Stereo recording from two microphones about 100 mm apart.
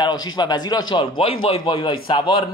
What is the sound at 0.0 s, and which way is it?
A man's voice, 45° left (ahead or behind).